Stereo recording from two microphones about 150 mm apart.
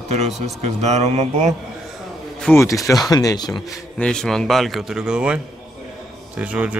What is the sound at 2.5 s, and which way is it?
Speech, 20° left (ahead or behind).